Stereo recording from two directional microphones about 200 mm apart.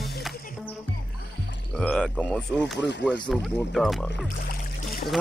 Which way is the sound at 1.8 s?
5° left (ahead or behind).